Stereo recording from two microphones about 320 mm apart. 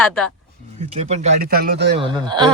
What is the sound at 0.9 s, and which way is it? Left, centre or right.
Speech, right.